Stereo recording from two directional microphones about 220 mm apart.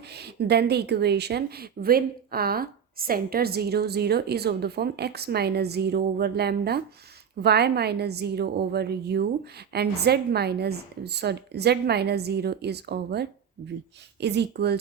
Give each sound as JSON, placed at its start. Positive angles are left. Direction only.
{"t": 0.1, "sound": "speech", "side_deg": -50}